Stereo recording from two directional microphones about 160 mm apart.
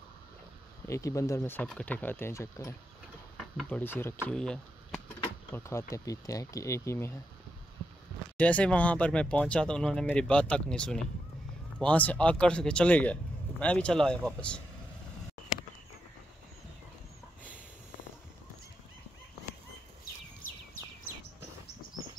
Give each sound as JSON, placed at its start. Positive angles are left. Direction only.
{"t": 0.8, "sound": "speech", "side_deg": 20}
{"t": 5.5, "sound": "speech", "side_deg": 15}
{"t": 8.4, "sound": "speech", "side_deg": 10}
{"t": 21.0, "sound": "bird", "side_deg": 90}